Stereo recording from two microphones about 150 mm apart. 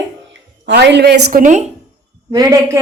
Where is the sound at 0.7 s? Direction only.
90° right; by 1.6 s 60° right (ahead or behind).